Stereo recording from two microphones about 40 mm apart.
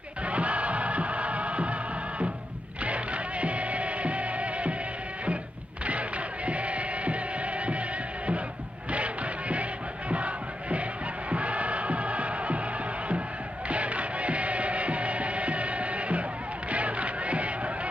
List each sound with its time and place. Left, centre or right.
0.2 s music: right
5.9 s music: right
8.9 s music: right
13.7 s music: right